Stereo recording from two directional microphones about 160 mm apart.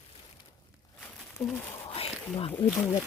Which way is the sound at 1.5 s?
15° left (ahead or behind).